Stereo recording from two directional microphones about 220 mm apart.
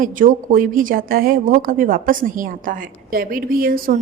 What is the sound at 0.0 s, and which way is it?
Speech, 40° right (ahead or behind).